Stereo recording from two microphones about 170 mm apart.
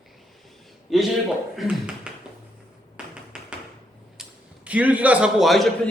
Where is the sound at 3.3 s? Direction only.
5° right (ahead or behind).